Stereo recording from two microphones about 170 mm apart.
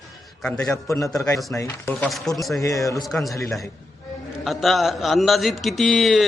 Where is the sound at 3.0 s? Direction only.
Centre (ahead or behind).